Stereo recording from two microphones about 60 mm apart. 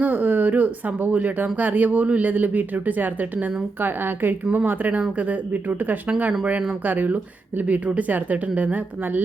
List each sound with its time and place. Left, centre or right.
0.0 s speech: right